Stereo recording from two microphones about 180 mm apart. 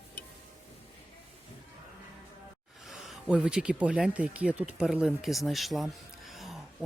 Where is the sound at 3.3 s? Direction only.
5° right (ahead or behind).